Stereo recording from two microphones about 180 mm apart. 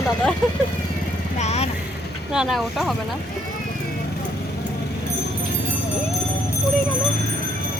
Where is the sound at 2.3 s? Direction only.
Centre (ahead or behind).